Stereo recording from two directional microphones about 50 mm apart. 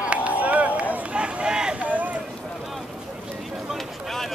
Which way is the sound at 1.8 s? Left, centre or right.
Right.